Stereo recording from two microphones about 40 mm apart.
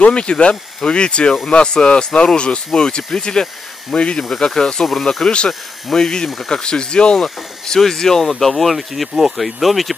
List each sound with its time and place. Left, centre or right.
0.0 s speech: left
4.2 s speech: centre